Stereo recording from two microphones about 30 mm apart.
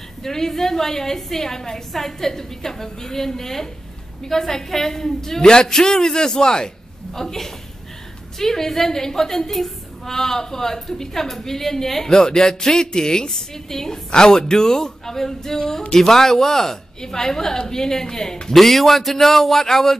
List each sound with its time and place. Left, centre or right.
0.2 s a woman's voice: centre
7.2 s a woman's voice: centre
13.3 s a woman's voice: centre
18.5 s a woman's voice: centre